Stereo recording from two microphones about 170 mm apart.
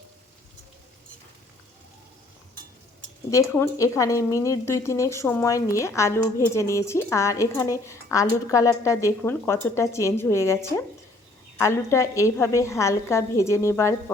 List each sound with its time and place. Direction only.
3.2 s a woman's voice: 15° left (ahead or behind)